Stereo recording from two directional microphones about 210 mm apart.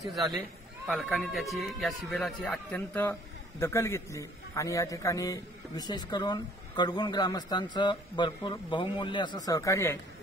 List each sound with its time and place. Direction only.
0.8 s speech: 5° right (ahead or behind); by 9.9 s 15° left (ahead or behind)